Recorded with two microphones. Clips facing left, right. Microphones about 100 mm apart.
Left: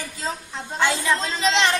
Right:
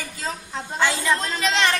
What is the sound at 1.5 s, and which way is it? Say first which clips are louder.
Speech: left 1 dB; 25° left (ahead or behind).